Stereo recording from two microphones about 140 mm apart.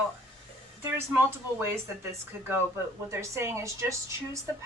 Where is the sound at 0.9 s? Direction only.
15° right (ahead or behind).